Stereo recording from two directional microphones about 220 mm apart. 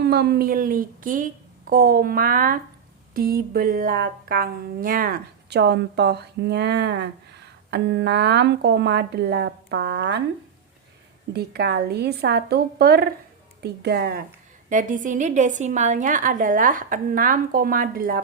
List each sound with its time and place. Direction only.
0.0 s a woman's voice: 50° right (ahead or behind)
11.3 s speech: 45° right (ahead or behind)
14.7 s a woman's voice: 35° right (ahead or behind)